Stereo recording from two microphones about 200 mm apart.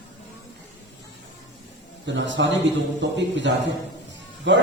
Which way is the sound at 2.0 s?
65° right (ahead or behind).